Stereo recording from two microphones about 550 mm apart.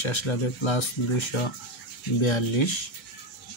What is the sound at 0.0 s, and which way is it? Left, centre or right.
Speech, left.